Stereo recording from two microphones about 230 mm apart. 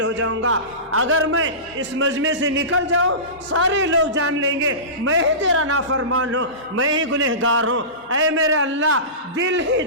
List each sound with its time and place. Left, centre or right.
0.0 s a man's voice: right